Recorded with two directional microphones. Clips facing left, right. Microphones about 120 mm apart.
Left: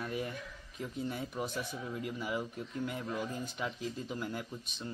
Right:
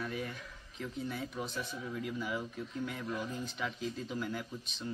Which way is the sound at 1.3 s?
15° left (ahead or behind).